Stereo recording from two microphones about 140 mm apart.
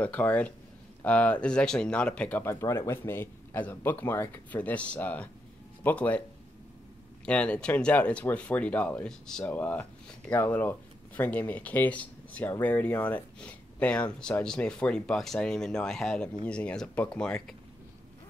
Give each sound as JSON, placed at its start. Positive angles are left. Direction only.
{"t": 0.0, "sound": "speech", "side_deg": 10}
{"t": 7.2, "sound": "speech", "side_deg": 10}